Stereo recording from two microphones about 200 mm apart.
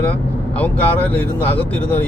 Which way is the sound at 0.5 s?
5° left (ahead or behind).